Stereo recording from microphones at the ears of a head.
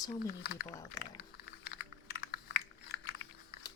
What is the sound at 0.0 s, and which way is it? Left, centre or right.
Typing, left.